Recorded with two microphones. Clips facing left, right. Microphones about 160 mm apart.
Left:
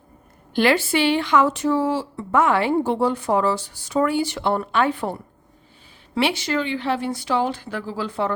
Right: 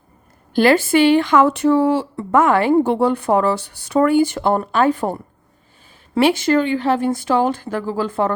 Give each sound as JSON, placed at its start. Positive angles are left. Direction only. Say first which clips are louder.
{"t": 0.5, "sound": "speech", "louder": "right 5 dB", "side_deg": -45}